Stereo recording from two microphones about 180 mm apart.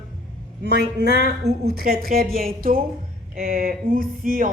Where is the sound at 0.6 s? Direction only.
65° right (ahead or behind).